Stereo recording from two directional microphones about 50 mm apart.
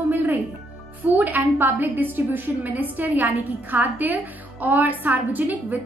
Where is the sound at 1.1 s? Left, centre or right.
Right.